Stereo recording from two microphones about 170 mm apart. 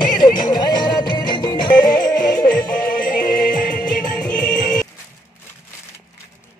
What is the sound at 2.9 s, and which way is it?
Music, 55° left (ahead or behind).